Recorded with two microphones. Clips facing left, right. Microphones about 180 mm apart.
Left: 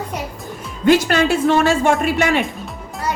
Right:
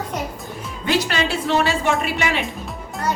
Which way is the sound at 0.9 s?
50° left (ahead or behind).